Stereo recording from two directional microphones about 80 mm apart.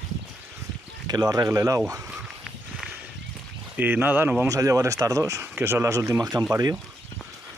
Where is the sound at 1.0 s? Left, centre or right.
Right.